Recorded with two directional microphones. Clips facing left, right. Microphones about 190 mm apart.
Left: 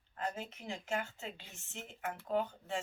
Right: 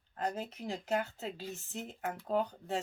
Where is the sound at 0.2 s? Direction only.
40° right (ahead or behind).